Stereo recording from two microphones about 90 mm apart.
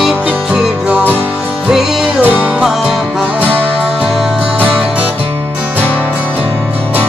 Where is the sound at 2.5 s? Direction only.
5° right (ahead or behind).